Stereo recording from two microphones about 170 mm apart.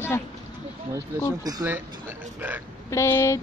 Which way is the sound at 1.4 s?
20° right (ahead or behind).